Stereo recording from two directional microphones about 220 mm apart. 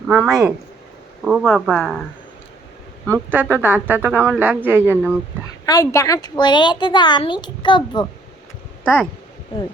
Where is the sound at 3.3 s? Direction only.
10° right (ahead or behind).